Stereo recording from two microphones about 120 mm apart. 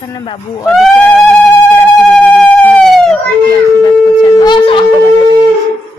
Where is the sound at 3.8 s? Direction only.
35° left (ahead or behind).